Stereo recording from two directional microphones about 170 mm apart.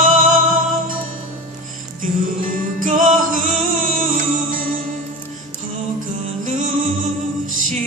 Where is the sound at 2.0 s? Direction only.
55° right (ahead or behind).